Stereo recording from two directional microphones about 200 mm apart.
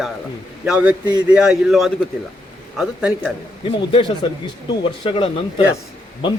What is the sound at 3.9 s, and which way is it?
Speech, 30° left (ahead or behind).